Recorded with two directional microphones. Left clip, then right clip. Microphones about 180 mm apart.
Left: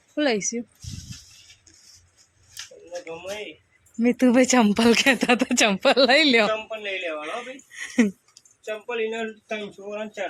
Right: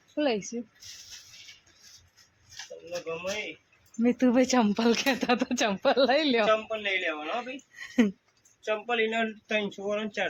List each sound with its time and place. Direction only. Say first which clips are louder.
0.2 s speech: left 5 dB; 20° left (ahead or behind)
4.0 s speech: left 5 dB; 20° left (ahead or behind)
6.5 s speech: right 1 dB; 40° right (ahead or behind)
7.7 s speech: left 4 dB; 10° left (ahead or behind)
8.6 s speech: even; 20° right (ahead or behind)